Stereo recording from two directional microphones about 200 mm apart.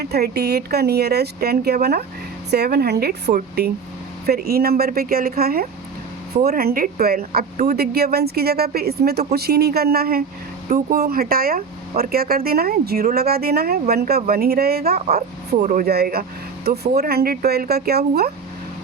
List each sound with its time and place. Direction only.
0.0 s speech: 50° right (ahead or behind)